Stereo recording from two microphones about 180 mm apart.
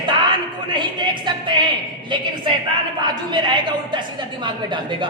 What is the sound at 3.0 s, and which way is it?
A woman's voice, 25° right (ahead or behind).